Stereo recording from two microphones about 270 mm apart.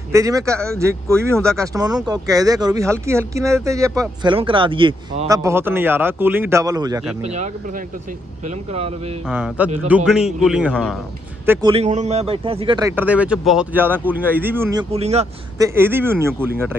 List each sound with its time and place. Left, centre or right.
0.1 s speech: centre
7.2 s speech: right
9.3 s a man's voice: centre
11.7 s speech: right
15.6 s speech: centre